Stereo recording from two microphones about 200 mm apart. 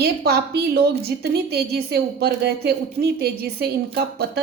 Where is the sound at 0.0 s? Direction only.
50° right (ahead or behind).